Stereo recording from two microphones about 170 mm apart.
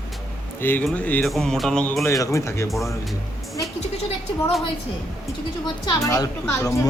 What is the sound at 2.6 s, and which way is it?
Speech, centre (ahead or behind).